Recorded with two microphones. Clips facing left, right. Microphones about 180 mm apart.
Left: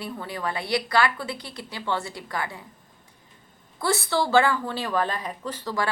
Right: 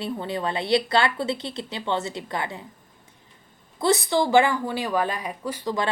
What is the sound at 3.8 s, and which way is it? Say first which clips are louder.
A woman's voice: right 4 dB; 20° right (ahead or behind).